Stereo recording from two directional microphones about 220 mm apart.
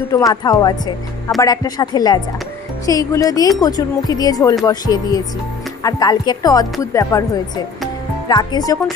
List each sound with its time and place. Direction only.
0.1 s a woman's voice: 15° left (ahead or behind)